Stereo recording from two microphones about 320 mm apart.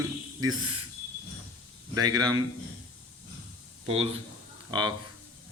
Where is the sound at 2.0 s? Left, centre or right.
Centre.